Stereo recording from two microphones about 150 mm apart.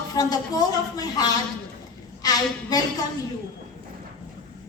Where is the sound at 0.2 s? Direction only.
25° left (ahead or behind).